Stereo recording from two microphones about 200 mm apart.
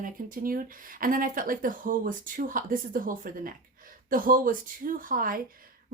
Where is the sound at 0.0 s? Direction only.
45° right (ahead or behind).